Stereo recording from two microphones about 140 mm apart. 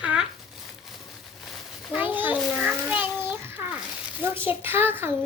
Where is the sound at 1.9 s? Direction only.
15° right (ahead or behind).